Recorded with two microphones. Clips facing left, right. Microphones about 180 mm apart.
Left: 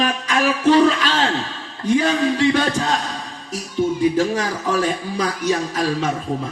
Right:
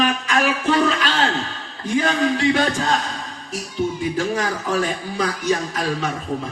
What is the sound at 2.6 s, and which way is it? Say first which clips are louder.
Speech: left 1 dB; 40° left (ahead or behind).